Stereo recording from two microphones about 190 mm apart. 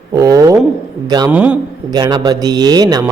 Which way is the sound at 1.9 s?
20° right (ahead or behind).